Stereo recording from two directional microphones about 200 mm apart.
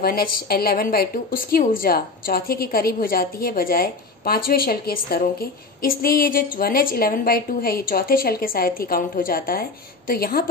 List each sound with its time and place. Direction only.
0.0 s a woman's voice: 45° left (ahead or behind)